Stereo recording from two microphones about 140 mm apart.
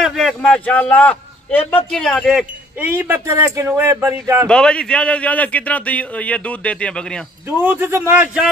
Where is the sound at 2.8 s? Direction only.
15° right (ahead or behind).